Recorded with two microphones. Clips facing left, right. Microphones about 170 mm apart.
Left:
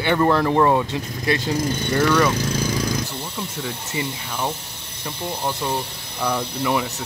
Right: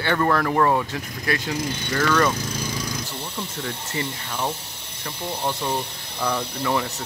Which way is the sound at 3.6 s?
5° left (ahead or behind).